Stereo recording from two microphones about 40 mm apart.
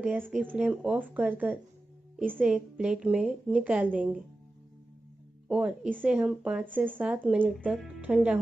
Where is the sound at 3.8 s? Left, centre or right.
Right.